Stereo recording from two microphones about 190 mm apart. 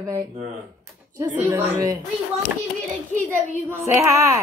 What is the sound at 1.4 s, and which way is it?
Speech, 10° right (ahead or behind).